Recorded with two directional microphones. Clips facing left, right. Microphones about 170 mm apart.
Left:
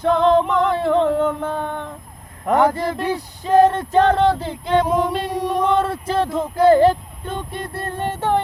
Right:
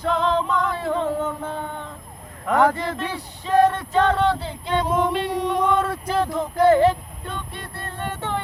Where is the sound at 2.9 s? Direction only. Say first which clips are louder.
Left 6 dB; 40° left (ahead or behind).